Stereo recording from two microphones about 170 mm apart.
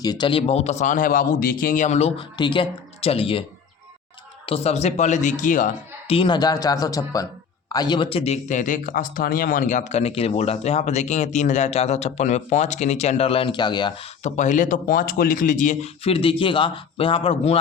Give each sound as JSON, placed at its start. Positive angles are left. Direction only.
{"t": 0.0, "sound": "speech", "side_deg": 25}
{"t": 4.4, "sound": "speech", "side_deg": 35}
{"t": 6.1, "sound": "speech", "side_deg": 30}
{"t": 14.3, "sound": "speech", "side_deg": 45}